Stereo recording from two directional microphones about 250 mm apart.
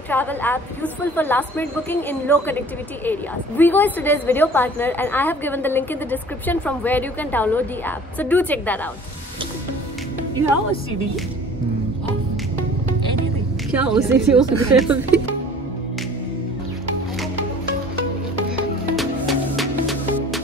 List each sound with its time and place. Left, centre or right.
0.1 s a woman's voice: centre
13.7 s a woman's voice: centre
18.9 s music: centre